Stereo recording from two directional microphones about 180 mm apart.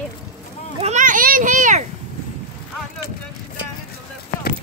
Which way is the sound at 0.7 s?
40° right (ahead or behind).